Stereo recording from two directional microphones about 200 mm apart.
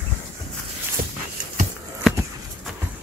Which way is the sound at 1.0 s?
45° right (ahead or behind).